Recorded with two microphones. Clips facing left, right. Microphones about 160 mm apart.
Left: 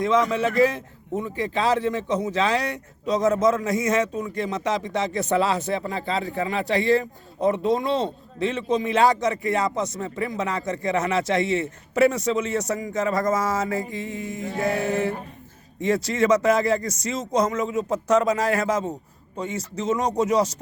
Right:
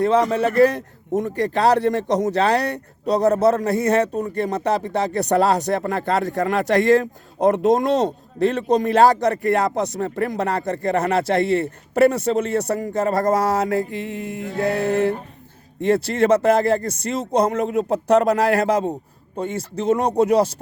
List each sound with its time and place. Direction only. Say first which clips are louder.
0.2 s speech: right 3 dB; 55° right (ahead or behind)
0.5 s a man's voice: right 4 dB; 65° right (ahead or behind)
5.3 s a man's voice: right 5 dB; 40° right (ahead or behind)
5.6 s a man's voice: right 5 dB; 70° right (ahead or behind)
6.7 s a man's voice: right 5 dB; 45° right (ahead or behind)
7.0 s a man's voice: right 5 dB; 75° right (ahead or behind)
7.7 s a man's voice: right 5 dB; 45° right (ahead or behind)
9.2 s speech: right 4 dB; 60° right (ahead or behind)